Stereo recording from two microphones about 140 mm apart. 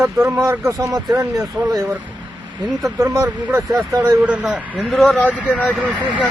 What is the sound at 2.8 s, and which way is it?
Speech, 25° right (ahead or behind).